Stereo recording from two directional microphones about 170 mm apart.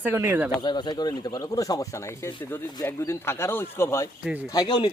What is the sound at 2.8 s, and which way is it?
Speech, 15° left (ahead or behind).